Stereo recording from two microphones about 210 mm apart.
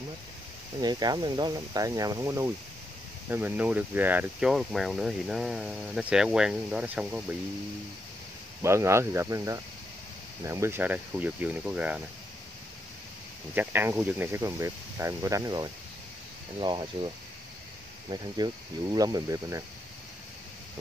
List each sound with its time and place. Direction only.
0.7 s speech: 20° right (ahead or behind)
8.6 s speech: 15° right (ahead or behind)
13.6 s speech: 10° right (ahead or behind)
18.1 s speech: 20° right (ahead or behind)